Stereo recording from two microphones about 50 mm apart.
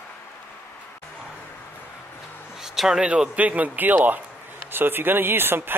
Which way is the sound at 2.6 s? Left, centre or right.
Centre.